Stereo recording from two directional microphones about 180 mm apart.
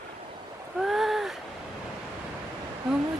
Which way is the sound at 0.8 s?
Centre (ahead or behind).